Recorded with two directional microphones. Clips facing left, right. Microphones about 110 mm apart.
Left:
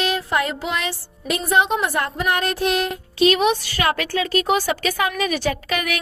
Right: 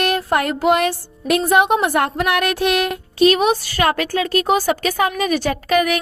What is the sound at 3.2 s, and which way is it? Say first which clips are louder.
A woman's voice: right 3 dB; 40° right (ahead or behind).